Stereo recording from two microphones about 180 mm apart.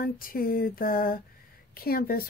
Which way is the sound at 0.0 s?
55° left (ahead or behind).